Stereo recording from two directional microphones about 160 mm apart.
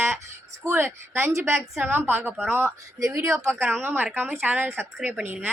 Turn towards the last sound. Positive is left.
turn(degrees=-15)  # may be behind; listen again after turning